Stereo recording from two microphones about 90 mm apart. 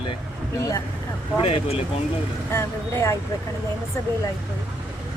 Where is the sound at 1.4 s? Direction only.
90° left.